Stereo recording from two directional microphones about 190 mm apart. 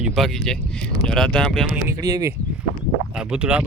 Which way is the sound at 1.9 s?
20° right (ahead or behind).